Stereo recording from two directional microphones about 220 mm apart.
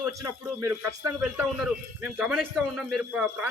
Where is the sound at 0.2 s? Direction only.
15° right (ahead or behind).